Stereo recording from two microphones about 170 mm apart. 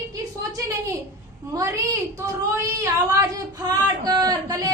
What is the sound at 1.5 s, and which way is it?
Speech, 20° right (ahead or behind).